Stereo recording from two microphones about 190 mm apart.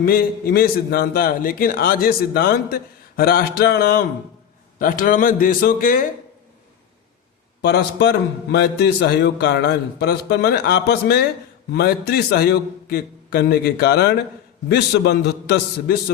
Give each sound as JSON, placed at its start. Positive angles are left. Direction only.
{"t": 0.0, "sound": "a man's voice", "side_deg": 50}
{"t": 7.6, "sound": "a man's voice", "side_deg": 60}